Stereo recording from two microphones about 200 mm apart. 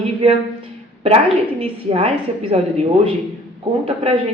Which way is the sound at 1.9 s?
30° right (ahead or behind).